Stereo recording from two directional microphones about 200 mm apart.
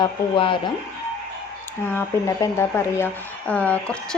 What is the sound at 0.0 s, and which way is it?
Speech, 25° left (ahead or behind).